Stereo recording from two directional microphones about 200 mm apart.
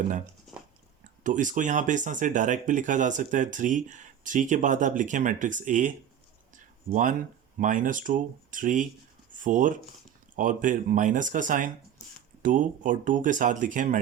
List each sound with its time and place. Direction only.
0.5 s biting: centre (ahead or behind)
1.2 s speech: 40° right (ahead or behind)
6.9 s speech: 40° right (ahead or behind)